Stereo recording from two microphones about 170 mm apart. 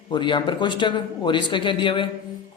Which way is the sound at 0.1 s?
25° left (ahead or behind).